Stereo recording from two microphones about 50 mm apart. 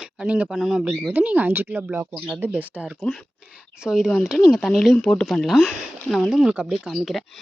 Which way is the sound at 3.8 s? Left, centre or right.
Centre.